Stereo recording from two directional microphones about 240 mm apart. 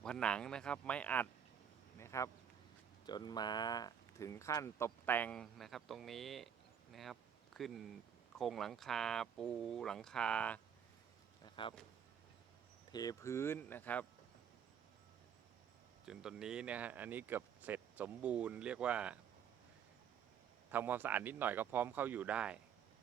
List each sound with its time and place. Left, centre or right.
0.0 s speech: centre
11.4 s a sound: centre
12.9 s speech: centre
16.0 s speech: centre
20.7 s speech: centre